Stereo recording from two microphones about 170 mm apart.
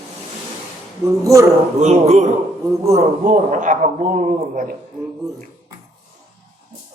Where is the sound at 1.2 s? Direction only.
20° right (ahead or behind).